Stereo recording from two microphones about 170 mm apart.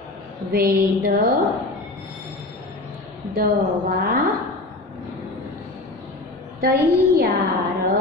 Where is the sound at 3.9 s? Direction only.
60° right (ahead or behind).